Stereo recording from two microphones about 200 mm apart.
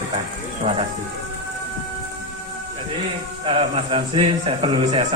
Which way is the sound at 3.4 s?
25° right (ahead or behind).